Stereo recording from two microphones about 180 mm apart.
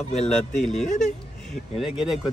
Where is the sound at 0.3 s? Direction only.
5° left (ahead or behind).